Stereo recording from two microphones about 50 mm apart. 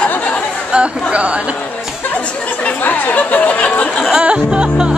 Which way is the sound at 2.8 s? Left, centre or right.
Left.